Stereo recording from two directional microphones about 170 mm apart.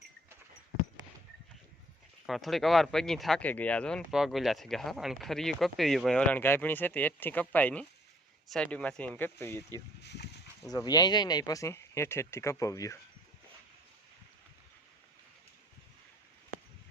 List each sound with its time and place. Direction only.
2.2 s speech: centre (ahead or behind)
10.7 s speech: 25° left (ahead or behind)